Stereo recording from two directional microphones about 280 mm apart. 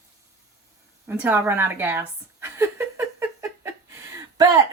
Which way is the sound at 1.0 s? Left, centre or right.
Centre.